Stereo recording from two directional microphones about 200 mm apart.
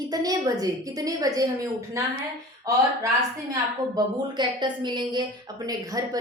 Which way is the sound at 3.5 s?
20° right (ahead or behind).